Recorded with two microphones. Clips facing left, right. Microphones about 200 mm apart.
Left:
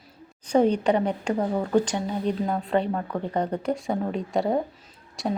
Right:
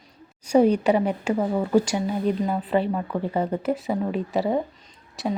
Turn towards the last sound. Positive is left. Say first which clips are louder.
# right 1 dB
turn(degrees=0)  # may be behind; listen again after turning